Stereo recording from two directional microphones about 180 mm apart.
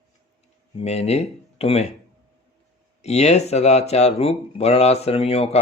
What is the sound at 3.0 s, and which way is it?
Speech, 35° left (ahead or behind).